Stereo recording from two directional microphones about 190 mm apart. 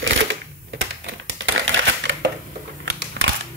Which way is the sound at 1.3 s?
80° right.